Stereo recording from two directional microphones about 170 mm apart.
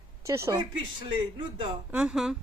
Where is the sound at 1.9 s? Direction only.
5° right (ahead or behind).